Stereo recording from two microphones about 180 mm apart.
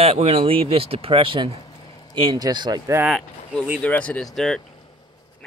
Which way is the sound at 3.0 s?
Centre (ahead or behind).